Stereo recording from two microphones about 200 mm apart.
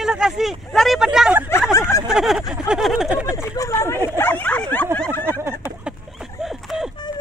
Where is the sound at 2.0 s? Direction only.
Centre (ahead or behind).